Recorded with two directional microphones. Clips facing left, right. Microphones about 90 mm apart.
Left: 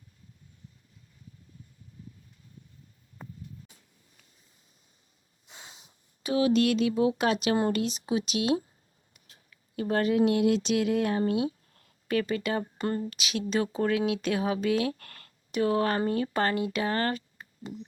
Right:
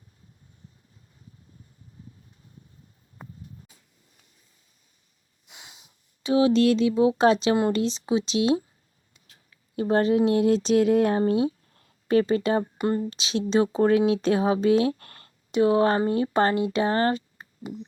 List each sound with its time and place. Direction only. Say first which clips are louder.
5.5 s snort: even; 15° right (ahead or behind)
6.2 s speech: right 5 dB; 30° right (ahead or behind)